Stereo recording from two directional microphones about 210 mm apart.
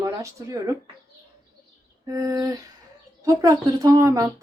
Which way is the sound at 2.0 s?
15° right (ahead or behind).